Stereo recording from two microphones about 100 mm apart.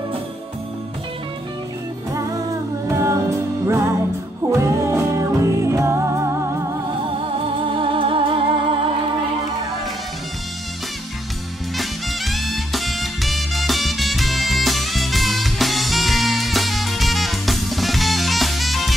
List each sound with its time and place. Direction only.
2.9 s music: 30° right (ahead or behind)
7.2 s music: 60° right (ahead or behind)
11.7 s music: centre (ahead or behind)